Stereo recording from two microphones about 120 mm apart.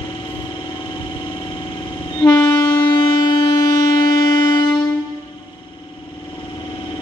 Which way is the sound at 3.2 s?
35° left (ahead or behind).